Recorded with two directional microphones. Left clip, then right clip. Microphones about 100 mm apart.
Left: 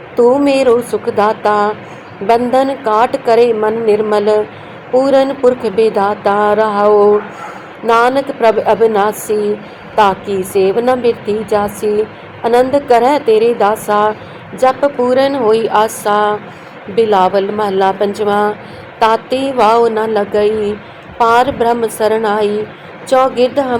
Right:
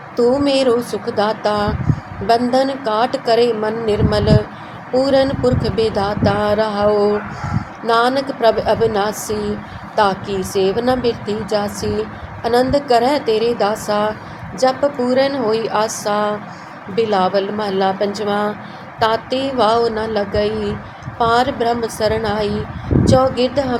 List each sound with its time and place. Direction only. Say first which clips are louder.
0.3 s a woman's voice: left 4 dB; 35° left (ahead or behind)